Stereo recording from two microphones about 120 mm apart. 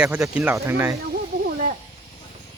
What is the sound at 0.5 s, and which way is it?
Speech, 20° right (ahead or behind).